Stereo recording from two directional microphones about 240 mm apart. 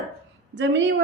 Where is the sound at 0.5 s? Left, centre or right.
Right.